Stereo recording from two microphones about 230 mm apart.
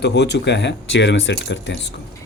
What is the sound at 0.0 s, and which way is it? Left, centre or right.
Speech, left.